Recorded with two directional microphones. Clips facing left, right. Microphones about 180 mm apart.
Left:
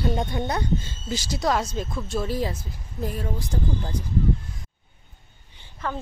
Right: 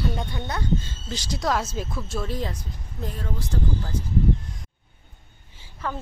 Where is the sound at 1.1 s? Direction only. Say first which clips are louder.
Left 2 dB; 5° left (ahead or behind).